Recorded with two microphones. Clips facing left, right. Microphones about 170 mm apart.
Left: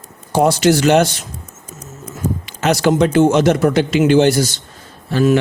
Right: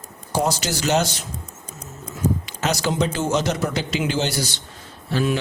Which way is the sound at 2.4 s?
60° left (ahead or behind).